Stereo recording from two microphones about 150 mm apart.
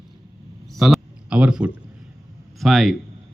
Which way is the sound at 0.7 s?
Centre (ahead or behind).